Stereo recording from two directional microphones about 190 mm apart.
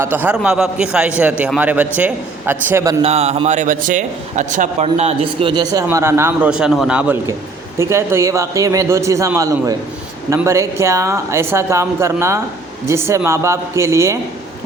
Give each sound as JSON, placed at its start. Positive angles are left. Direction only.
{"t": 0.0, "sound": "a man's voice", "side_deg": -10}
{"t": 3.0, "sound": "a man's voice", "side_deg": -35}